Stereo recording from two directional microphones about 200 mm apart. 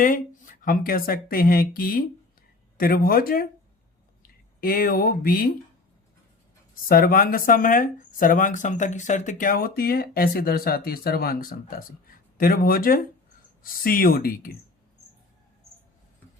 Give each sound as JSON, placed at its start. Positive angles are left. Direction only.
{"t": 0.0, "sound": "speech", "side_deg": 45}
{"t": 6.8, "sound": "speech", "side_deg": 45}